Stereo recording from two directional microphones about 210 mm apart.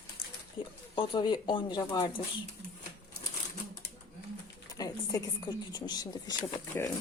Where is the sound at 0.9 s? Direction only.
25° left (ahead or behind).